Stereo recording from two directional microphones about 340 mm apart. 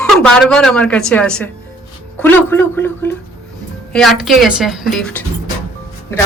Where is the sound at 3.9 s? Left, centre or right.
Centre.